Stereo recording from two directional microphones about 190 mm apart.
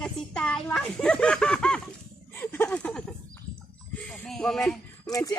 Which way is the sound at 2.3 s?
10° left (ahead or behind).